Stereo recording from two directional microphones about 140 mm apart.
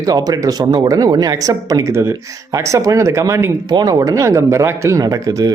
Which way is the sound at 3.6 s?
30° right (ahead or behind).